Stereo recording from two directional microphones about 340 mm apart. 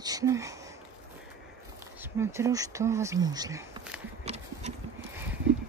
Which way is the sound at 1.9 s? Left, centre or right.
Centre.